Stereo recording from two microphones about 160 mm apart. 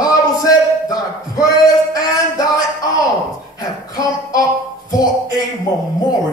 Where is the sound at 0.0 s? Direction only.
25° left (ahead or behind).